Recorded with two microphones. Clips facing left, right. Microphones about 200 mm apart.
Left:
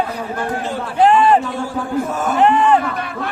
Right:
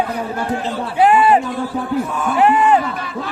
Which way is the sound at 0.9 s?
10° right (ahead or behind).